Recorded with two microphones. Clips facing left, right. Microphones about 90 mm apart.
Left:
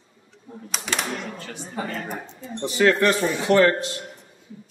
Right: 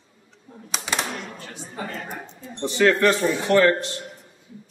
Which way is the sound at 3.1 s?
20° left (ahead or behind).